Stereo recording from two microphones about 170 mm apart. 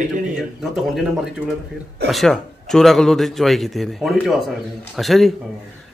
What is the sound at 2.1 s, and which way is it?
A man's voice, centre (ahead or behind).